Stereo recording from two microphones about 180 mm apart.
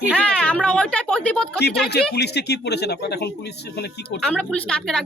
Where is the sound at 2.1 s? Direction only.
65° left (ahead or behind).